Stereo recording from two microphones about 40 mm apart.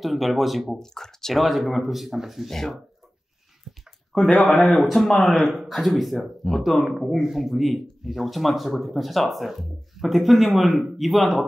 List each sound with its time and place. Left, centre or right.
0.0 s speech: centre
0.7 s speech: centre
1.3 s speech: centre
4.1 s speech: centre
4.4 s speech: left
4.8 s speech: centre